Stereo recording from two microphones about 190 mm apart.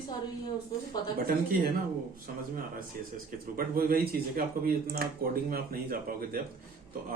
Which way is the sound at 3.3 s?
50° right (ahead or behind).